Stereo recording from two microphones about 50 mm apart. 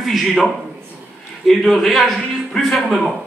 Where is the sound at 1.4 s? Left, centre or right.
Centre.